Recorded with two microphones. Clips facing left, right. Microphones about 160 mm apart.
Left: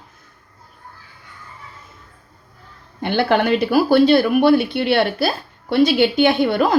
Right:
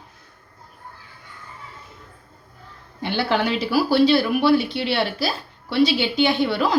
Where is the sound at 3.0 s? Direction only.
55° left (ahead or behind).